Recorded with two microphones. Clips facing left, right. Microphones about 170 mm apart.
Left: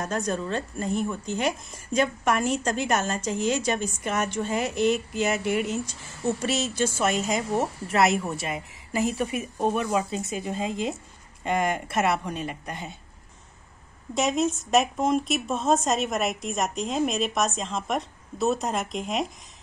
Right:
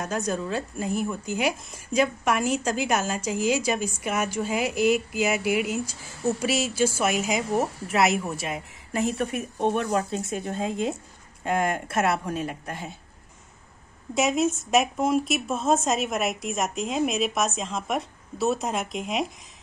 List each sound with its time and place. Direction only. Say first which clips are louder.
0.0 s a woman's voice: even; 5° right (ahead or behind)
14.1 s a woman's voice: right 1 dB; 5° right (ahead or behind)